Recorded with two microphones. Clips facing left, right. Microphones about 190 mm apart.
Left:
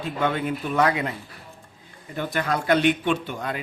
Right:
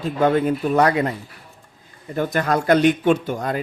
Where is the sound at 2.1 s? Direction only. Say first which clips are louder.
Right 5 dB; 45° right (ahead or behind).